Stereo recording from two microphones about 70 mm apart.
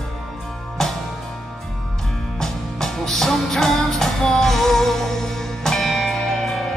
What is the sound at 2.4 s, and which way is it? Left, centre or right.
Music, centre.